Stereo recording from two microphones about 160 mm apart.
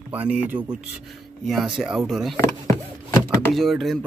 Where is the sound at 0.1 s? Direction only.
10° right (ahead or behind).